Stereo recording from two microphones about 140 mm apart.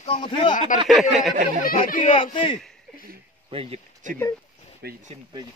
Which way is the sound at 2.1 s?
40° left (ahead or behind).